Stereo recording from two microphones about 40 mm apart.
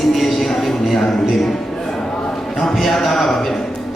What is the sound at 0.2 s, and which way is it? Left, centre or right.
Music, centre.